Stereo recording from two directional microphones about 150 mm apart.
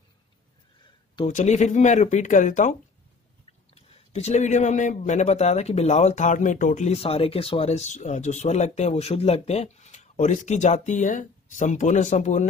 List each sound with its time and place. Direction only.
1.3 s speech: 50° left (ahead or behind)
3.7 s speech: 45° left (ahead or behind)
6.9 s speech: 40° left (ahead or behind)